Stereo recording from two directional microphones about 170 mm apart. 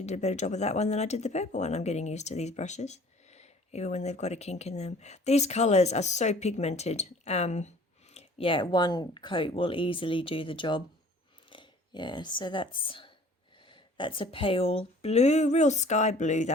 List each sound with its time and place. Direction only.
0.0 s speech: 40° left (ahead or behind)